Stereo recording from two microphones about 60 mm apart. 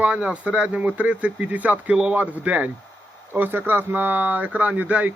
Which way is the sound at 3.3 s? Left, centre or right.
Right.